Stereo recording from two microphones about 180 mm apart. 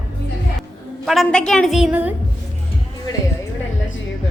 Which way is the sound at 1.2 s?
5° left (ahead or behind).